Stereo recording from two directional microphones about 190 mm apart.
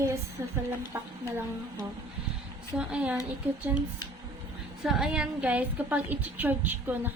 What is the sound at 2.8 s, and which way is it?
Speech, 5° right (ahead or behind).